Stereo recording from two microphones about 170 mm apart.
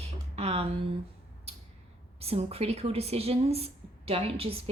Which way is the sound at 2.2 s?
35° right (ahead or behind).